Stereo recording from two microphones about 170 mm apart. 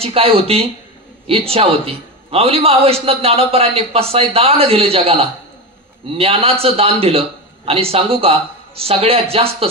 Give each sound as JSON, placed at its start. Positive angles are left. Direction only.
{"t": 0.0, "sound": "a man's voice", "side_deg": -35}